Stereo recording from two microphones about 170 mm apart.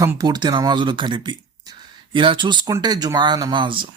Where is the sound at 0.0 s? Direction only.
20° right (ahead or behind).